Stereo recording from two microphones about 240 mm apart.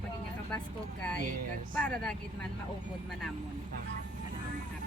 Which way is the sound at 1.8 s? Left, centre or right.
Centre.